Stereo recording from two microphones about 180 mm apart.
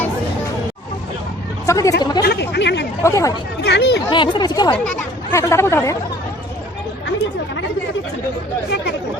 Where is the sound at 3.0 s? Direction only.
15° left (ahead or behind).